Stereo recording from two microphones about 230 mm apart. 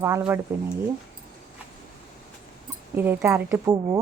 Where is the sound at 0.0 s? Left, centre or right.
Centre.